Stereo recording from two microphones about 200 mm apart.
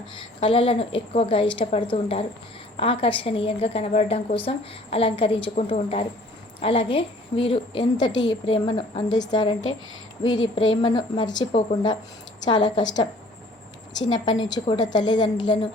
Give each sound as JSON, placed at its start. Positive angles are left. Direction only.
{"t": 0.3, "sound": "a woman's voice", "side_deg": 25}
{"t": 10.7, "sound": "a woman's voice", "side_deg": 25}
{"t": 14.1, "sound": "a woman's voice", "side_deg": 20}